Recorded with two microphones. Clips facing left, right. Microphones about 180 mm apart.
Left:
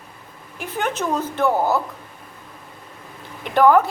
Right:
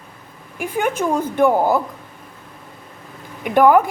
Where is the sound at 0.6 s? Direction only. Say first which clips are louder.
Right 4 dB; 10° right (ahead or behind).